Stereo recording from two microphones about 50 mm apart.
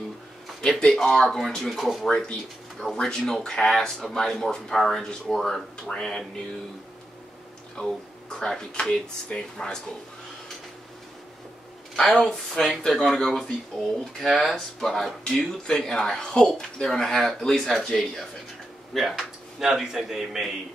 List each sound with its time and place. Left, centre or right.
0.6 s speech: centre
7.8 s speech: centre
11.9 s speech: centre
15.2 s speech: centre